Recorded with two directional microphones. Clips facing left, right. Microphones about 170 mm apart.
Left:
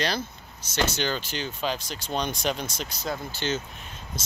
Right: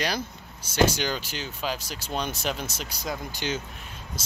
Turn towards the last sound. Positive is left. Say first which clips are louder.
# left 1 dB
turn(degrees=-10)  # may be behind; listen again after turning